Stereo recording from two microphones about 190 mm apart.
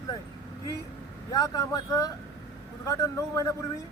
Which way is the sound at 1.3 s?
20° left (ahead or behind).